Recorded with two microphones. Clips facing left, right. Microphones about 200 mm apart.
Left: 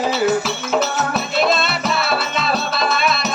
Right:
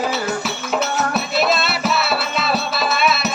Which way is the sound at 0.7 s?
5° right (ahead or behind).